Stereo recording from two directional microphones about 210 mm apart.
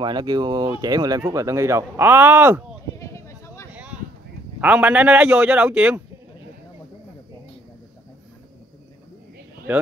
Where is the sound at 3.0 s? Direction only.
15° left (ahead or behind).